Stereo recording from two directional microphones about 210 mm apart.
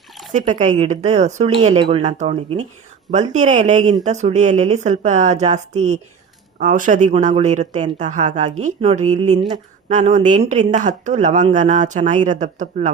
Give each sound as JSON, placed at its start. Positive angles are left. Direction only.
{"t": 0.3, "sound": "speech", "side_deg": -35}